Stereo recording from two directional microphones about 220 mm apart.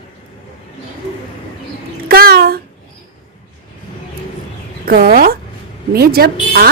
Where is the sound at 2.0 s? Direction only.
45° right (ahead or behind).